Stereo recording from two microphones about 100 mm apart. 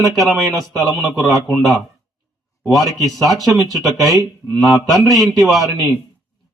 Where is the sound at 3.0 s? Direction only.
Centre (ahead or behind).